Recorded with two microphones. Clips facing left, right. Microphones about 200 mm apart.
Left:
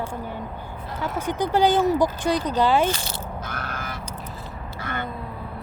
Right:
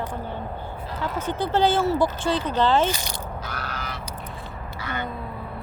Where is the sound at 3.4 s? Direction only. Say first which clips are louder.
Left 1 dB; 50° left (ahead or behind).